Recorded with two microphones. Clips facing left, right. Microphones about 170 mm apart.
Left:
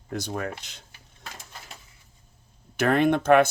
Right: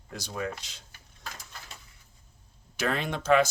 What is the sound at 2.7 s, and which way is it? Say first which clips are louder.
Speech: left 9 dB; 55° left (ahead or behind).